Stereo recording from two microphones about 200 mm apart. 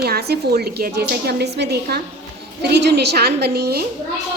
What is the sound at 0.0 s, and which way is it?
A woman's voice, 50° right (ahead or behind).